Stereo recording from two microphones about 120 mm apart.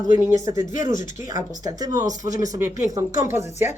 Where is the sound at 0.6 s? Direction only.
90° left.